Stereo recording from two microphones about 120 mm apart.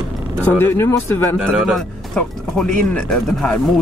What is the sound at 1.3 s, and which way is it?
Speech, 5° right (ahead or behind).